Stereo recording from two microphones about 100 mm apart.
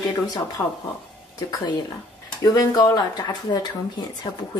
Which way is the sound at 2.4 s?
35° left (ahead or behind).